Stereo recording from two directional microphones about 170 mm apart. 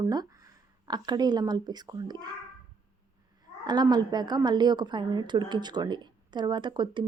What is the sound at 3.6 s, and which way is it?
A woman's voice, 25° right (ahead or behind).